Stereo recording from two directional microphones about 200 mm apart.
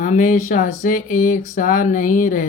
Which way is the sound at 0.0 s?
40° left (ahead or behind).